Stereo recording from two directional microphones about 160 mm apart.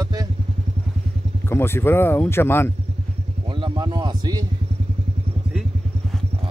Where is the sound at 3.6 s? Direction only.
30° right (ahead or behind).